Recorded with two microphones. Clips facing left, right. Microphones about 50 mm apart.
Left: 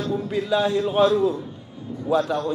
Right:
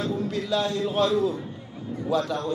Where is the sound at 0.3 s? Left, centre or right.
Centre.